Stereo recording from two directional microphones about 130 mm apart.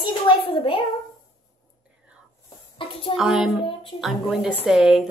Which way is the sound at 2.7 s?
45° left (ahead or behind).